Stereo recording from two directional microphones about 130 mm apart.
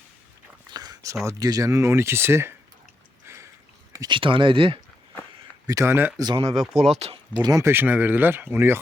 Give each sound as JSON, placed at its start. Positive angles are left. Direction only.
{"t": 0.7, "sound": "a sound", "side_deg": -30}
{"t": 1.2, "sound": "speech", "side_deg": -25}
{"t": 4.0, "sound": "speech", "side_deg": -40}
{"t": 5.6, "sound": "speech", "side_deg": -25}
{"t": 6.1, "sound": "speech", "side_deg": -30}
{"t": 6.5, "sound": "speech", "side_deg": 0}
{"t": 6.8, "sound": "speech", "side_deg": -55}
{"t": 7.4, "sound": "speech", "side_deg": -25}